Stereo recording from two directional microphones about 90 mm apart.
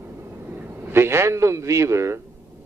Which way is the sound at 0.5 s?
25° right (ahead or behind).